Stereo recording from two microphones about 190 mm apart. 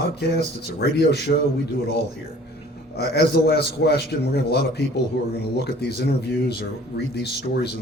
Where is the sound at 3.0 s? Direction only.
60° left (ahead or behind).